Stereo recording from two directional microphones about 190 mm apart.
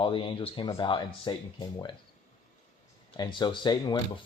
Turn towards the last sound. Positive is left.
turn(degrees=25)  # may be behind; listen again after turning